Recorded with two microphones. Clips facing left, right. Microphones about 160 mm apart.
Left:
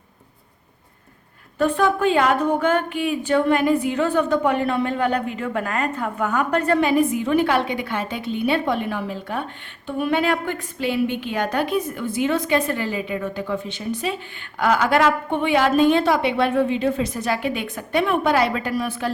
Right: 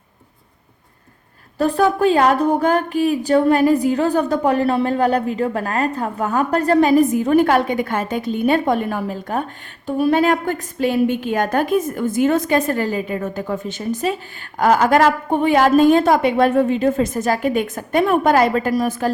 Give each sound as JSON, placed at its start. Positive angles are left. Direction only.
{"t": 1.5, "sound": "a woman's voice", "side_deg": -35}